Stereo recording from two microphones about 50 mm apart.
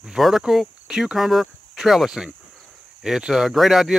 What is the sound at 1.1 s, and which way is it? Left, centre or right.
Speech, centre.